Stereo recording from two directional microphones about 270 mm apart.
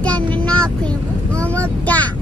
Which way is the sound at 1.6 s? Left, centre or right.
Centre.